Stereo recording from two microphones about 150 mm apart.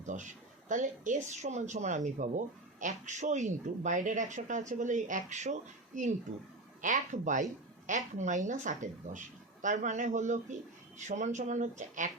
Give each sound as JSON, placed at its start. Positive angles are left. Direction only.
{"t": 0.0, "sound": "speech", "side_deg": -55}